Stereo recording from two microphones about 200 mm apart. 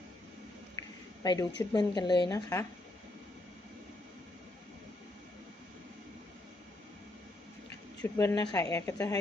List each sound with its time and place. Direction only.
0.8 s a woman's voice: 20° left (ahead or behind)
8.0 s speech: 15° left (ahead or behind)